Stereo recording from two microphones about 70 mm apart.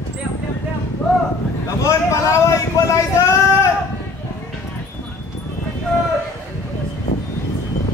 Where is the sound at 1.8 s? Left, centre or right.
Left.